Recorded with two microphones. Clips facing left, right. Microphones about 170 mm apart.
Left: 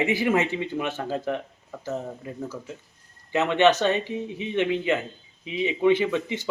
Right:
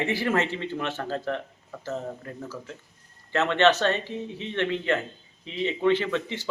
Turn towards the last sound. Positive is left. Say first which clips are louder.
# left 3 dB
turn(degrees=15)  # may be behind; listen again after turning